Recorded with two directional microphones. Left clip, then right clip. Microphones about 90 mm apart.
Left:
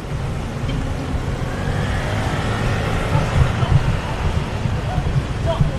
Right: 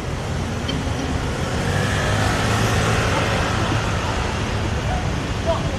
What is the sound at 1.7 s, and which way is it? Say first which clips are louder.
Vehicle: right 4 dB; 40° right (ahead or behind).